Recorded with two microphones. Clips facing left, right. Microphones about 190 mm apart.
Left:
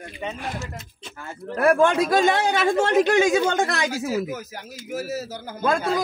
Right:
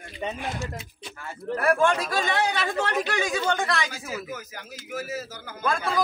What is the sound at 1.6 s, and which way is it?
Speech, 50° left (ahead or behind).